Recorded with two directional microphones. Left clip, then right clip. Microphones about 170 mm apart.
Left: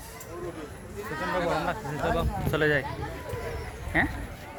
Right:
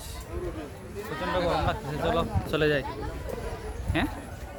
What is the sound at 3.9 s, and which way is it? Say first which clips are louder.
Speech: left 3 dB; 15° right (ahead or behind).